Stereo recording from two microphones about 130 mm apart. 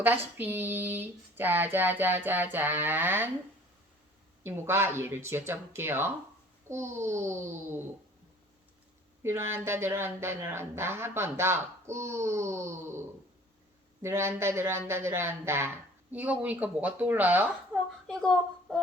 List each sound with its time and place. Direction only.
0.0 s speech: 15° right (ahead or behind)
4.4 s speech: 20° right (ahead or behind)
9.2 s speech: 20° right (ahead or behind)
18.1 s speech: 5° left (ahead or behind)